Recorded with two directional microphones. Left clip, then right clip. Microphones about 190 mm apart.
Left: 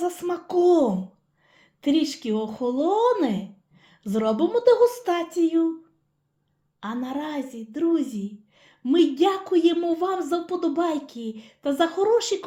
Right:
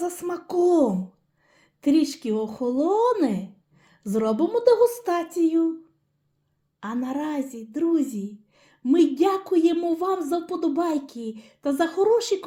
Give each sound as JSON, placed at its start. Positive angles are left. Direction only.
{"t": 0.0, "sound": "speech", "side_deg": -35}
{"t": 6.7, "sound": "a woman's voice", "side_deg": -40}